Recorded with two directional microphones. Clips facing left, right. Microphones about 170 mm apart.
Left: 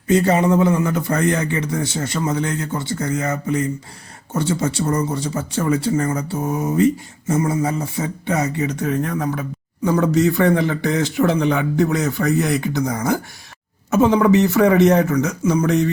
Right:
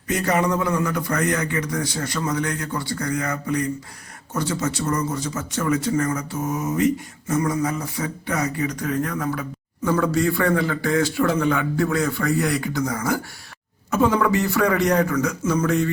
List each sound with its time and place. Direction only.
0.1 s speech: 25° left (ahead or behind)